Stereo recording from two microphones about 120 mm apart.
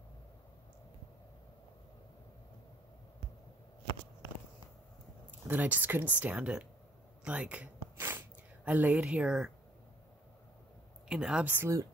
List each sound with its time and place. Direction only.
5.5 s speech: 15° right (ahead or behind)
7.2 s a sound: 10° right (ahead or behind)
8.6 s speech: 15° right (ahead or behind)
11.1 s speech: 5° right (ahead or behind)
11.5 s speech: 25° right (ahead or behind)